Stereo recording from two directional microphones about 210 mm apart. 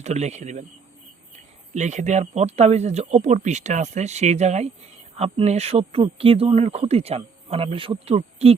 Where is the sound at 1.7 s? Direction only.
35° right (ahead or behind).